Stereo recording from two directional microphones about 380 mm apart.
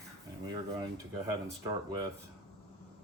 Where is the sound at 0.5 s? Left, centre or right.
Centre.